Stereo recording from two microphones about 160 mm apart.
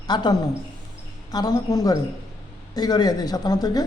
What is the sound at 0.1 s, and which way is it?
Speech, 25° left (ahead or behind).